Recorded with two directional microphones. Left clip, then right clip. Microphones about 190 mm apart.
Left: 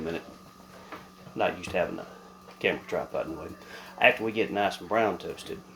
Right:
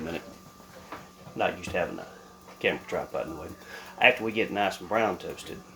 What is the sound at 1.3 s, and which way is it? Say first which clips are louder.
Speech: left 1 dB; 20° left (ahead or behind).